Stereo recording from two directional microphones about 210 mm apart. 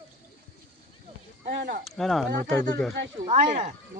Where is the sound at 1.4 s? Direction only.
50° right (ahead or behind).